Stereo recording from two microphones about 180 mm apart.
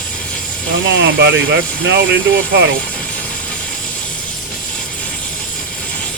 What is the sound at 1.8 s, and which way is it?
Speech, 75° right (ahead or behind).